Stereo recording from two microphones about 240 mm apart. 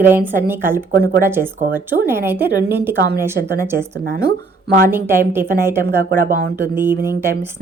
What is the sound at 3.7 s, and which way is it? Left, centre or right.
Speech, right.